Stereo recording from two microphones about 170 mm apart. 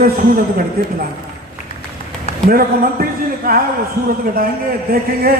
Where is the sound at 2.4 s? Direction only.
60° right (ahead or behind).